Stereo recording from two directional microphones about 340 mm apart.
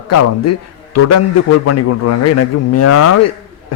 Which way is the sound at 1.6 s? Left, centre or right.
Left.